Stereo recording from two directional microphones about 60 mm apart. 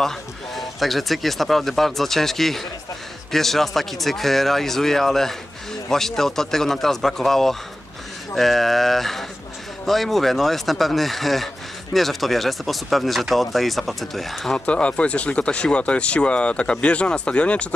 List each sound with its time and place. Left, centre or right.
0.0 s speech: centre
14.7 s speech: centre